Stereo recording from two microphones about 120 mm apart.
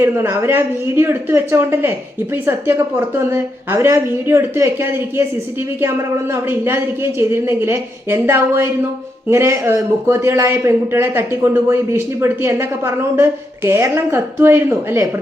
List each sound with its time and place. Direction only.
0.0 s speech: 20° right (ahead or behind)